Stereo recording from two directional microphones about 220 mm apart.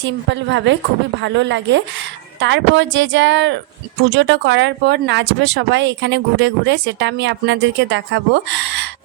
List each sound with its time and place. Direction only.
0.0 s speech: 55° right (ahead or behind)